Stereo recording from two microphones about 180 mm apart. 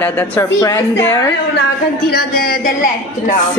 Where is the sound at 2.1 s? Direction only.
55° left (ahead or behind).